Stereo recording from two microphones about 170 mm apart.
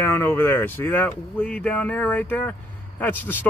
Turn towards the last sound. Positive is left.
turn(degrees=10)  # may be behind; listen again after turning